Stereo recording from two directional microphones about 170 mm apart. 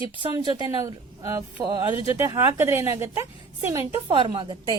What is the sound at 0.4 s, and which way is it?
A woman's voice, 25° right (ahead or behind).